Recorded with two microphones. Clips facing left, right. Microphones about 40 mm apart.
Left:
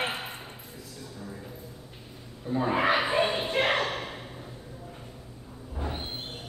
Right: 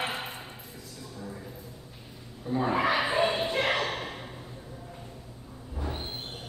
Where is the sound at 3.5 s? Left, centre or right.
Left.